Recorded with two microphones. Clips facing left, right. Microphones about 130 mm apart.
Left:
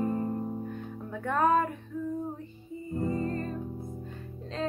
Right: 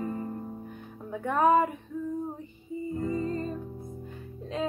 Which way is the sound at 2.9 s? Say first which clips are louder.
Left 1 dB; 25° left (ahead or behind).